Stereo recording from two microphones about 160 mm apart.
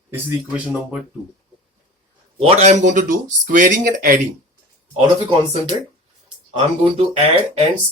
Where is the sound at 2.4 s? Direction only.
40° right (ahead or behind).